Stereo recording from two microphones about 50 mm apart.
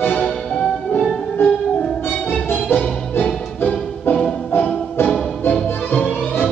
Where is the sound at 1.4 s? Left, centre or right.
Left.